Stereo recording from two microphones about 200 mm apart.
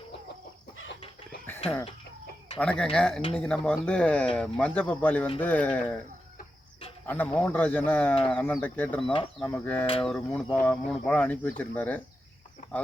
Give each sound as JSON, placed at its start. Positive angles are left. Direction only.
{"t": 2.6, "sound": "speech", "side_deg": 5}
{"t": 7.1, "sound": "speech", "side_deg": 10}